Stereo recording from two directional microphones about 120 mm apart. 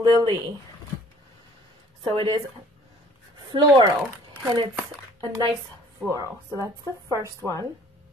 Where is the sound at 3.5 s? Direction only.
35° right (ahead or behind).